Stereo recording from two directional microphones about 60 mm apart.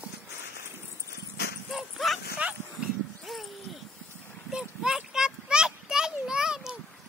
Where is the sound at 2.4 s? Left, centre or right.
Right.